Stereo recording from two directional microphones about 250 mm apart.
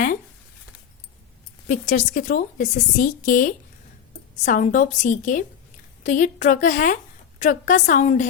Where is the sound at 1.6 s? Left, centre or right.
Left.